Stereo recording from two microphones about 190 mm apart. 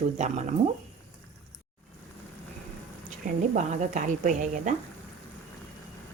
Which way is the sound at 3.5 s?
40° right (ahead or behind).